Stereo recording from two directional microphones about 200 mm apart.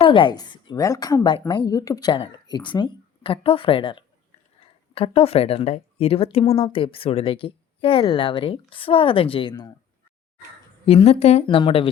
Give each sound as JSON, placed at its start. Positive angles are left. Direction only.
{"t": 0.0, "sound": "speech", "side_deg": 25}
{"t": 10.8, "sound": "speech", "side_deg": 30}